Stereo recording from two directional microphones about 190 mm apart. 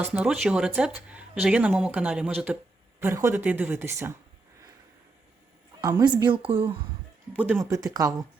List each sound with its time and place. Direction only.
0.0 s speech: 5° right (ahead or behind)
5.8 s speech: 20° right (ahead or behind)
7.3 s speech: 5° right (ahead or behind)
7.6 s speech: 20° right (ahead or behind)